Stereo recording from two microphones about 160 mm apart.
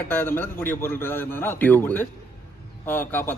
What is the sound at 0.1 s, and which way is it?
A man's voice, 10° left (ahead or behind).